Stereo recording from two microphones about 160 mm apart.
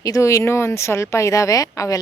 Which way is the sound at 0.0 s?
20° left (ahead or behind).